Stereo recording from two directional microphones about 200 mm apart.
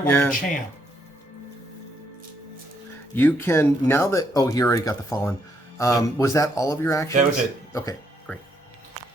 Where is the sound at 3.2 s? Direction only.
10° left (ahead or behind).